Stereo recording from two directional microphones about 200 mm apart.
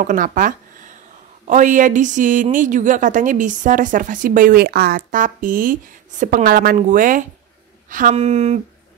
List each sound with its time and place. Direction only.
0.0 s a woman's voice: 40° right (ahead or behind)